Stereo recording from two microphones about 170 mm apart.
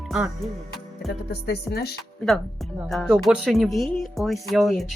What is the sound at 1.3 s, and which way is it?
Speech, 70° left (ahead or behind).